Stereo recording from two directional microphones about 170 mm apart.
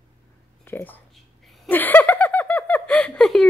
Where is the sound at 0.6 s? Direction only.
10° left (ahead or behind).